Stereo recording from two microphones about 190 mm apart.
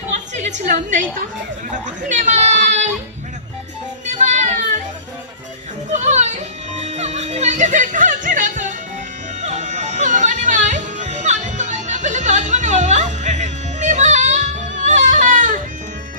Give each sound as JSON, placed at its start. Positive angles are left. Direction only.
{"t": 0.1, "sound": "a sound", "side_deg": -35}
{"t": 1.7, "sound": "speech", "side_deg": -40}
{"t": 5.9, "sound": "music", "side_deg": -35}